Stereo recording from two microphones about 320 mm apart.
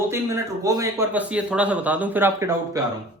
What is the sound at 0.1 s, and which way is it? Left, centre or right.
A man's voice, centre.